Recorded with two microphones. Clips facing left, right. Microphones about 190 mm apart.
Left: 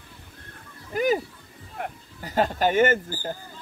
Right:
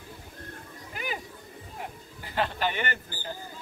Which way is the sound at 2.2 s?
40° left (ahead or behind).